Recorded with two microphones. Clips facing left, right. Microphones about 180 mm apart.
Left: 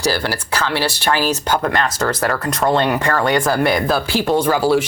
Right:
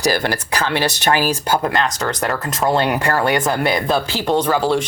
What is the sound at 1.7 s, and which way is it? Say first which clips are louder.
Speech: left 1 dB; centre (ahead or behind).